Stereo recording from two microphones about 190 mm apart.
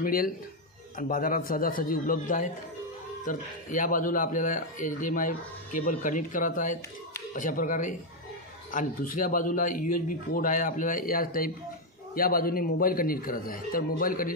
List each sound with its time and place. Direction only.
0.0 s a man's voice: 50° left (ahead or behind)